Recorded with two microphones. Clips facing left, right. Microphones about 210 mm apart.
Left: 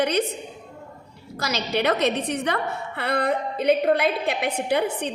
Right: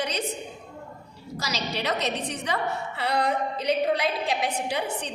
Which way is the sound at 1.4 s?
55° left (ahead or behind).